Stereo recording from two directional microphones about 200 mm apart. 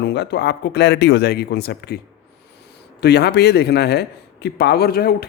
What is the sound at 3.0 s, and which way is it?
A man's voice, 55° left (ahead or behind).